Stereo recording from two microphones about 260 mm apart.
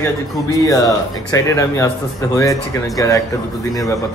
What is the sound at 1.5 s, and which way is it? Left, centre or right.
A man's voice, centre.